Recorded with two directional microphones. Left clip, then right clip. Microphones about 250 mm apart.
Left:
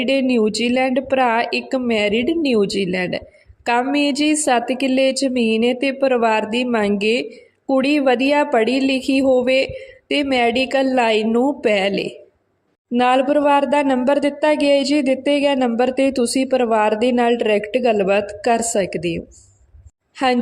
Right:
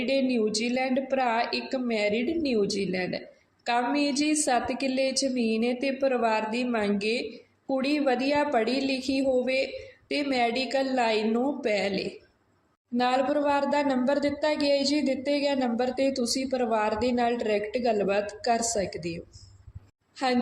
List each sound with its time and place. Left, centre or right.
0.0 s a woman's voice: left